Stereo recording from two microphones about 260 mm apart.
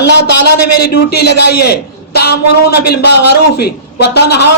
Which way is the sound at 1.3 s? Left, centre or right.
Left.